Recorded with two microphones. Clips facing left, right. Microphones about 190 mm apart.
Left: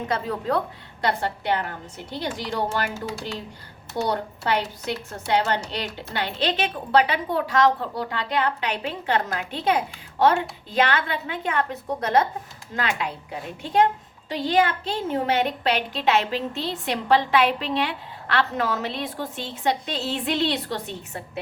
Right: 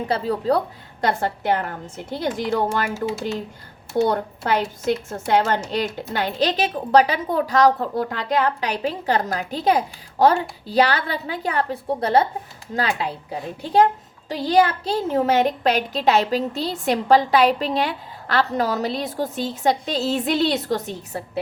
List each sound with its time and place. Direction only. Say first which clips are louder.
0.1 s a child's voice: right 5 dB; 35° right (ahead or behind)
1.0 s a woman's voice: right 3 dB; 45° right (ahead or behind)
4.0 s a woman's voice: right 3 dB; 45° right (ahead or behind)
14.3 s a child's voice: right 3 dB; 40° right (ahead or behind)